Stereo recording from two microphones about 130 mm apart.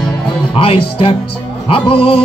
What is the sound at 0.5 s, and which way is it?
Speech, 45° left (ahead or behind).